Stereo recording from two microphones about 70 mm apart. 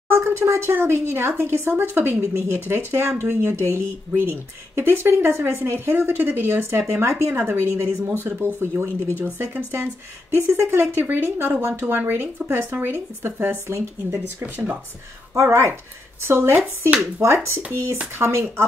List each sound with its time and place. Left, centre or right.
0.1 s speech: right
14.2 s speech: right
15.3 s speech: right